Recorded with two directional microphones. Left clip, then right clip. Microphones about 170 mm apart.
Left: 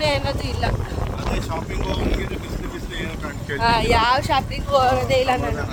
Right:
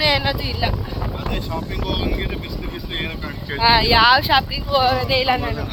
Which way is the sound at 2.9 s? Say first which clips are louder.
Right 4 dB; 35° left (ahead or behind).